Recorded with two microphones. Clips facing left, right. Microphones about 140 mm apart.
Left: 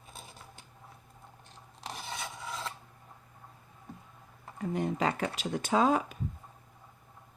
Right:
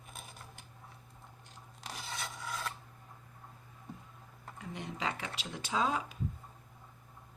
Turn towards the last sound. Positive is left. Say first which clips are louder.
# left 7 dB
turn(degrees=50)  # may be behind; listen again after turning